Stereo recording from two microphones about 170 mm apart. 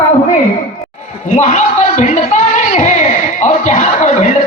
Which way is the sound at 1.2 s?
45° left (ahead or behind).